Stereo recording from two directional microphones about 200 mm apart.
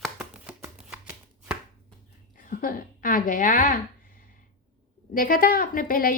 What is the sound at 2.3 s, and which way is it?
A woman's voice, 40° left (ahead or behind).